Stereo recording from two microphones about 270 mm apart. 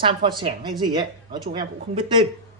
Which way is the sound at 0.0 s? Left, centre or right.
Centre.